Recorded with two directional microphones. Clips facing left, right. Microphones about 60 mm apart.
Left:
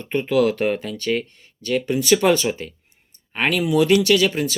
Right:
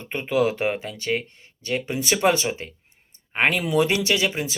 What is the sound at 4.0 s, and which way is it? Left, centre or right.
Speech, right.